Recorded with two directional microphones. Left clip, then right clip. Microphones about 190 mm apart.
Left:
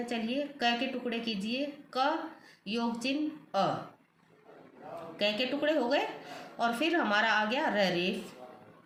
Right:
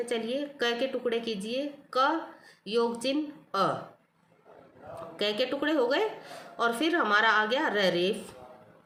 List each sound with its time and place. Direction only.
0.0 s a woman's voice: 55° right (ahead or behind)
5.1 s a woman's voice: 55° right (ahead or behind)